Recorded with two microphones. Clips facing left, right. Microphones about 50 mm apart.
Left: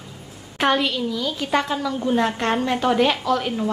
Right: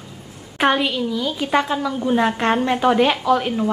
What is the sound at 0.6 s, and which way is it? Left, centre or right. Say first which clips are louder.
A woman's voice: right 2 dB; centre.